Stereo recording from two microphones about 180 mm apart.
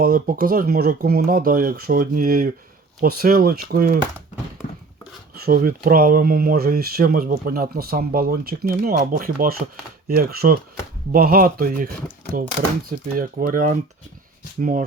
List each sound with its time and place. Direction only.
0.0 s speech: 50° right (ahead or behind)
5.4 s speech: 55° right (ahead or behind)
12.9 s speech: 50° right (ahead or behind)